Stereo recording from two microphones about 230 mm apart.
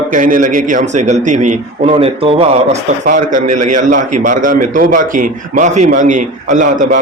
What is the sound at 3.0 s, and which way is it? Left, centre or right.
A man's voice, right.